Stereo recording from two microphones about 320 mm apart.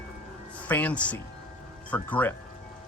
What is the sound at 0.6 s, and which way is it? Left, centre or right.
Speech, centre.